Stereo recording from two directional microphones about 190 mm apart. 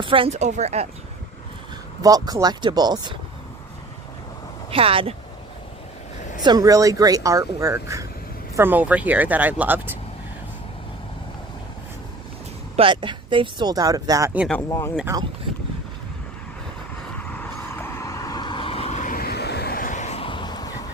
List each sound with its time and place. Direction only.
0.0 s speech: 25° right (ahead or behind)
2.0 s speech: 20° right (ahead or behind)
4.7 s speech: 30° right (ahead or behind)
6.4 s speech: 20° right (ahead or behind)
12.7 s speech: 25° right (ahead or behind)
14.7 s speech: 15° left (ahead or behind)
17.2 s vehicle: 10° left (ahead or behind)